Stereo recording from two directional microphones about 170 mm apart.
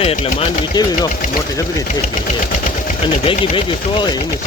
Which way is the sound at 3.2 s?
30° left (ahead or behind).